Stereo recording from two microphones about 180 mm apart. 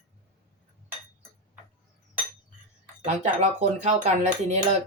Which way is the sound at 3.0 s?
40° right (ahead or behind).